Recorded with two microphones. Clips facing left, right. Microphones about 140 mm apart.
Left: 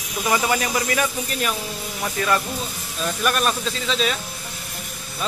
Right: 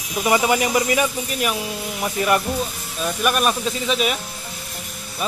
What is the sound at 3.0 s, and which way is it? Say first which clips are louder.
Speech: right 2 dB; 10° right (ahead or behind).